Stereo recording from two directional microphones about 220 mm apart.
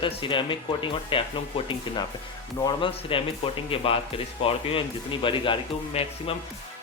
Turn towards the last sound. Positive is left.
turn(degrees=25)  # may be behind; listen again after turning